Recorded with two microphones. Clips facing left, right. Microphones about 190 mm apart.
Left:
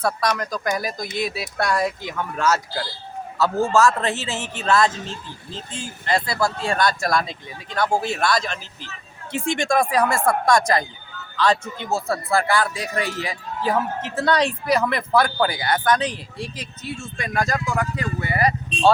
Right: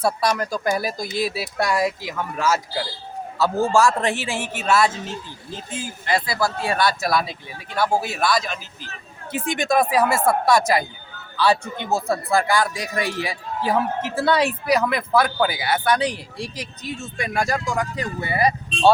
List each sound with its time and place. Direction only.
0.2 s speech: 5° right (ahead or behind)
0.6 s speech: 30° right (ahead or behind)
1.4 s speech: 5° right (ahead or behind)